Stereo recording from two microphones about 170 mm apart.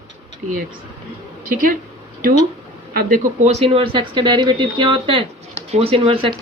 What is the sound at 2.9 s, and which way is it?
Speech, 55° right (ahead or behind).